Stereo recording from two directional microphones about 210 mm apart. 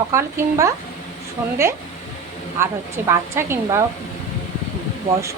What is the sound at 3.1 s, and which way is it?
Speech, 15° right (ahead or behind).